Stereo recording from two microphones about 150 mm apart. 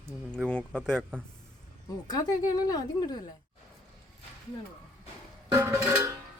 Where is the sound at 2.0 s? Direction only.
25° left (ahead or behind).